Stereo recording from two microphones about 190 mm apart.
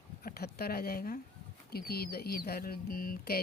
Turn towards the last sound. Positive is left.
turn(degrees=50)  # may be behind; listen again after turning